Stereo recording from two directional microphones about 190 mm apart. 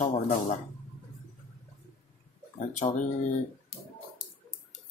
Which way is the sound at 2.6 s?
40° left (ahead or behind).